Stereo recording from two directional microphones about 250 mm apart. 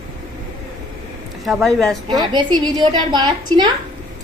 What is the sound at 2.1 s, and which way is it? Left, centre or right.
A woman's voice, centre.